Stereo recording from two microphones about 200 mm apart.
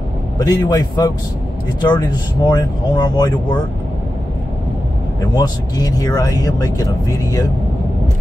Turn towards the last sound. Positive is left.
turn(degrees=20)  # may be behind; listen again after turning